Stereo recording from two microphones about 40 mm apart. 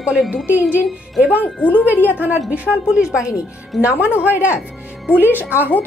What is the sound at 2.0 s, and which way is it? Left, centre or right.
Speech, right.